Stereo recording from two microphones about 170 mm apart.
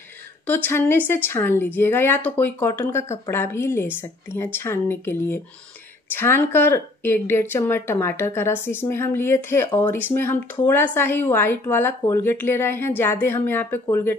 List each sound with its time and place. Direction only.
0.7 s speech: 15° left (ahead or behind)